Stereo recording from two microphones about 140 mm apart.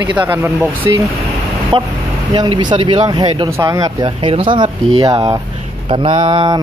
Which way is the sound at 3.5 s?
25° right (ahead or behind).